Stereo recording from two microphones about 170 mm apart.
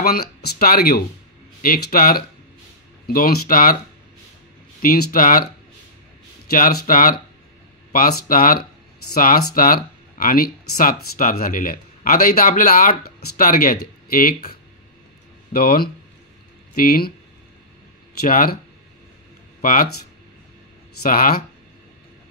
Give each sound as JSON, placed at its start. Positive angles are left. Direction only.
{"t": 0.0, "sound": "speech", "side_deg": 60}
{"t": 4.8, "sound": "speech", "side_deg": 55}
{"t": 6.5, "sound": "speech", "side_deg": 55}
{"t": 15.5, "sound": "speech", "side_deg": 60}
{"t": 18.2, "sound": "speech", "side_deg": 60}
{"t": 19.6, "sound": "speech", "side_deg": 55}
{"t": 21.0, "sound": "speech", "side_deg": 60}